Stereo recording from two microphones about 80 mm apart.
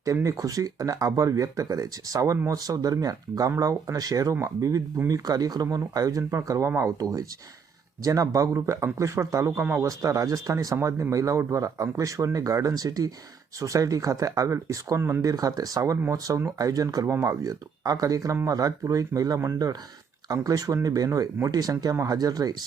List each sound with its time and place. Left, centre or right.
0.0 s a man's voice: right
15.2 s speech: right